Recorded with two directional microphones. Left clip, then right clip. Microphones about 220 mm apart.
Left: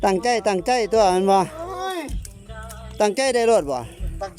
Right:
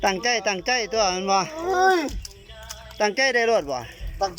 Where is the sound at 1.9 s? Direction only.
5° right (ahead or behind).